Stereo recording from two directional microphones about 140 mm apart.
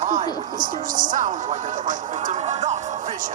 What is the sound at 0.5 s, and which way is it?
Speech, 70° right (ahead or behind).